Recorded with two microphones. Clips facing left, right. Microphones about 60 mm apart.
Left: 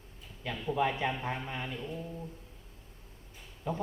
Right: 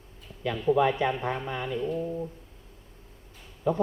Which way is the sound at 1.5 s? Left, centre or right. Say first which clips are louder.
Right 6 dB; right.